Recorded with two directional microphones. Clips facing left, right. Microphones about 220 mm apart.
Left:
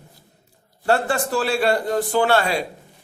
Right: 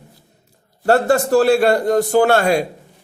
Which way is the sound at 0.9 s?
40° right (ahead or behind).